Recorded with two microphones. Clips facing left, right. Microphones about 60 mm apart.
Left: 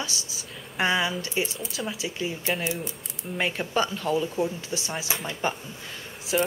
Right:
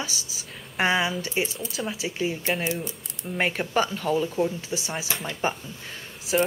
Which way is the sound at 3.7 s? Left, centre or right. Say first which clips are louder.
Even; centre.